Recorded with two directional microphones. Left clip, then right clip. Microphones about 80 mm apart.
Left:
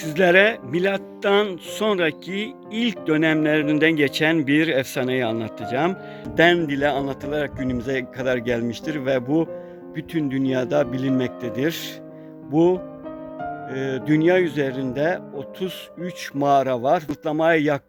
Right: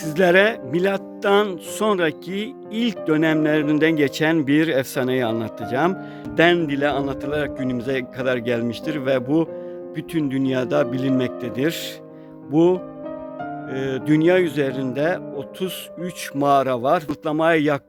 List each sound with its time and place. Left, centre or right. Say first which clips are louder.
0.0 s speech: even; centre; by 6.0 s right
6.3 s speech: even; right